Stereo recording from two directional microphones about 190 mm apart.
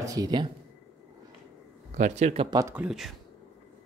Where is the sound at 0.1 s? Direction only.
20° right (ahead or behind).